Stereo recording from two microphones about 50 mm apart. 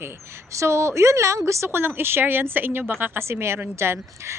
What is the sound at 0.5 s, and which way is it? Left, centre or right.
A woman's voice, right.